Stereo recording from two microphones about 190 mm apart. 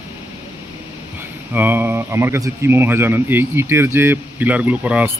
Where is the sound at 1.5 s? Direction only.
10° right (ahead or behind).